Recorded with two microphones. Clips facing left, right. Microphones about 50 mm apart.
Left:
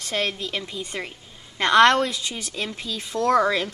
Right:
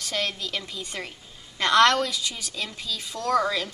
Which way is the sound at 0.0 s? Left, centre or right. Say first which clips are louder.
Left 3 dB; left.